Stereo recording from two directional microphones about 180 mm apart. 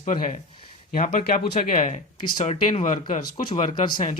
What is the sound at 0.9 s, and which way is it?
Speech, 50° left (ahead or behind).